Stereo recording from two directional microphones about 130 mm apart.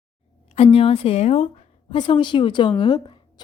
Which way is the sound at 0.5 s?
45° left (ahead or behind).